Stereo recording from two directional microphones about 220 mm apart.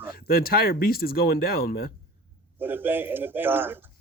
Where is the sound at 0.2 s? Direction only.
45° left (ahead or behind).